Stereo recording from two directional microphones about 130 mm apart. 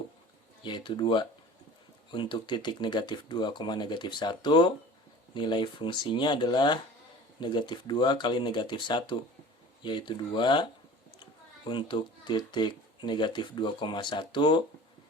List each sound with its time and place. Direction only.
0.6 s speech: 35° left (ahead or behind)